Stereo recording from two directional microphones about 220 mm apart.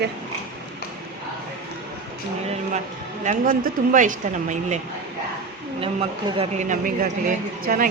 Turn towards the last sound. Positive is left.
turn(degrees=-40)  # may be behind; listen again after turning